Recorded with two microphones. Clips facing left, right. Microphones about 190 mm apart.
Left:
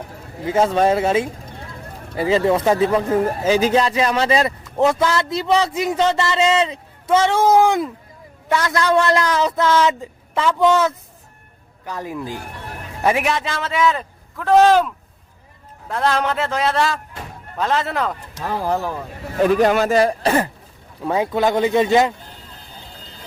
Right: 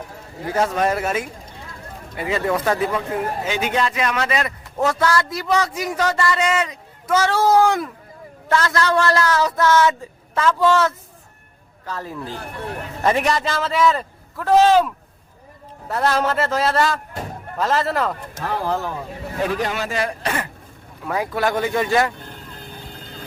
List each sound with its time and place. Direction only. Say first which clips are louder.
0.5 s a man's voice: left 4 dB; 25° left (ahead or behind); by 14.8 s 5° right (ahead or behind)
15.9 s a man's voice: even; 5° right (ahead or behind)
19.5 s speech: left 9 dB; 50° left (ahead or behind); by 20.5 s 35° left (ahead or behind)
21.0 s speech: left 4 dB; 25° left (ahead or behind)
22.6 s vehicle: right 4 dB; 55° right (ahead or behind)